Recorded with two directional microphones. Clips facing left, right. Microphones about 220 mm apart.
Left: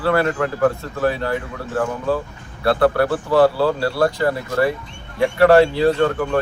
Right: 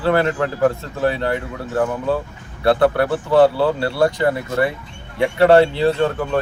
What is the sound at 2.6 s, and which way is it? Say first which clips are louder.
Speech: right 1 dB; 20° right (ahead or behind).